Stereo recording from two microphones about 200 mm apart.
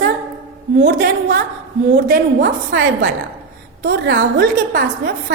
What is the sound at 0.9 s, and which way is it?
A woman's voice, 40° right (ahead or behind).